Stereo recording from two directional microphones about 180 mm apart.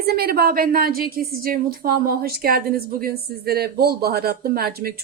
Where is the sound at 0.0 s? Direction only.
60° right (ahead or behind).